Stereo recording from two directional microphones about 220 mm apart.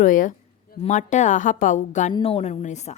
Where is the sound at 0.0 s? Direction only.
35° left (ahead or behind).